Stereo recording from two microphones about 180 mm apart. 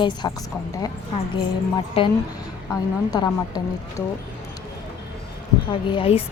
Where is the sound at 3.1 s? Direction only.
20° left (ahead or behind).